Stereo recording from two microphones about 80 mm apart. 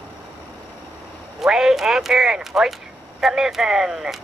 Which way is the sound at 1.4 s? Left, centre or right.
Centre.